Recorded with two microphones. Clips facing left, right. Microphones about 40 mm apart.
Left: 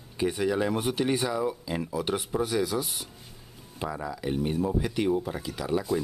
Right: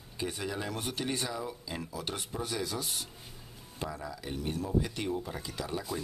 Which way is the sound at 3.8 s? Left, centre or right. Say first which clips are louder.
Left 6 dB; centre.